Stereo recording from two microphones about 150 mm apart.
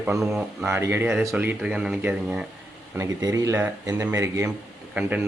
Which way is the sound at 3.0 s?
20° right (ahead or behind).